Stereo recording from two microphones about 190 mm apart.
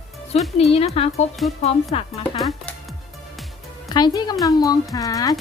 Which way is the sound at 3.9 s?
20° left (ahead or behind).